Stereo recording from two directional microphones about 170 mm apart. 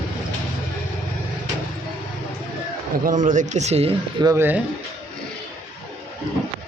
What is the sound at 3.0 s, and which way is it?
Speech, 50° right (ahead or behind).